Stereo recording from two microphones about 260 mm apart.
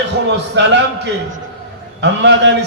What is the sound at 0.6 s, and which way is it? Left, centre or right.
Speech, right.